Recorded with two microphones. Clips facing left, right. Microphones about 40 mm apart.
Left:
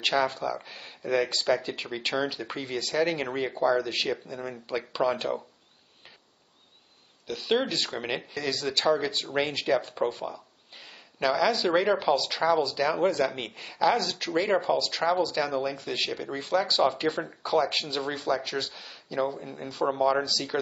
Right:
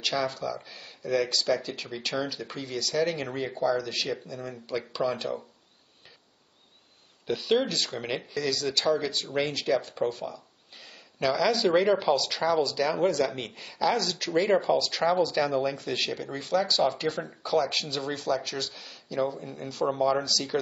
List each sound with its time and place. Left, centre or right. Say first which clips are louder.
0.0 s speech: left 3 dB; left
7.4 s speech: even; centre
16.3 s speech: even; centre